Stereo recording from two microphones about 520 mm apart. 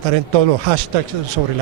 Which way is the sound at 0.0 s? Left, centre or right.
Right.